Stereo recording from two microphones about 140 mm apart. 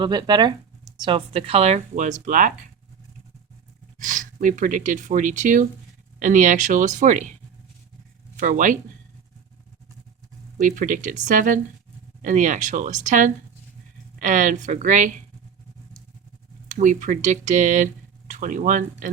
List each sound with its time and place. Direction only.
0.0 s speech: 30° right (ahead or behind); by 2.5 s 65° right (ahead or behind)
3.9 s speech: 65° right (ahead or behind)
8.4 s speech: 65° right (ahead or behind)
10.6 s speech: 70° right (ahead or behind)
16.6 s speech: 60° right (ahead or behind)